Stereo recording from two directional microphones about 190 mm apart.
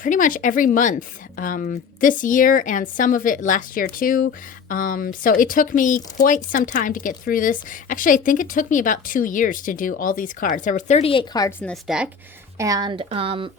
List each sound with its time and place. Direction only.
0.0 s speech: 45° left (ahead or behind); by 11.5 s 20° left (ahead or behind)
11.6 s a woman's voice: centre (ahead or behind)
12.5 s speech: 20° right (ahead or behind)